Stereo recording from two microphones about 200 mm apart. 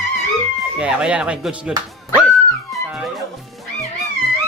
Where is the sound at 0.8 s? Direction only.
5° right (ahead or behind).